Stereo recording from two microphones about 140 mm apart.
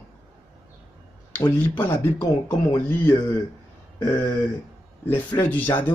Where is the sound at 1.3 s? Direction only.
15° left (ahead or behind).